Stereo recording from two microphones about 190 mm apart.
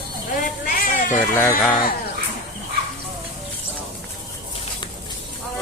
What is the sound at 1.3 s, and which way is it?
Speech, 10° left (ahead or behind).